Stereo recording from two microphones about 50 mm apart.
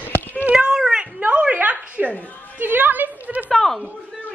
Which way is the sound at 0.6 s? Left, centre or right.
Centre.